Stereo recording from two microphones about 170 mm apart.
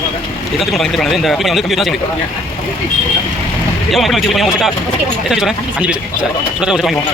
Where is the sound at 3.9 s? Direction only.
Centre (ahead or behind).